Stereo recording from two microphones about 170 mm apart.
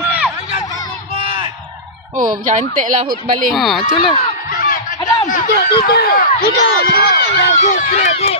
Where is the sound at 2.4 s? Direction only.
50° right (ahead or behind).